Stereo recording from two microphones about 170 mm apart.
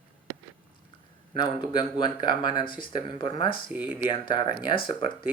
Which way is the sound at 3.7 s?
10° right (ahead or behind).